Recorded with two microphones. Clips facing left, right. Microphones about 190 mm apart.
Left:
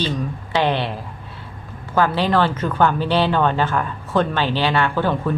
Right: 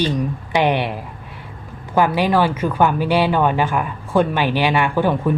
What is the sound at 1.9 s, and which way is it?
Speech, 15° right (ahead or behind).